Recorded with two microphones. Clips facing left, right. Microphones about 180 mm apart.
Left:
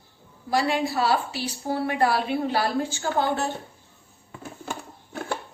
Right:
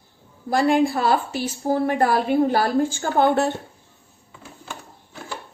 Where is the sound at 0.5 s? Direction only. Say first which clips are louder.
Right 5 dB; 50° right (ahead or behind).